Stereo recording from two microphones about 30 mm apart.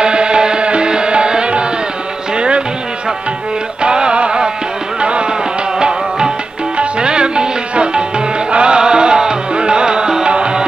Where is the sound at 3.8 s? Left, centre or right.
Right.